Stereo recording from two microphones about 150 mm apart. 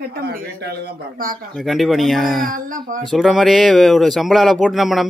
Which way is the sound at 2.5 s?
60° right (ahead or behind).